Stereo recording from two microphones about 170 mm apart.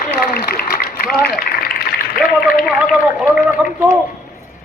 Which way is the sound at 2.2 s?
Centre (ahead or behind).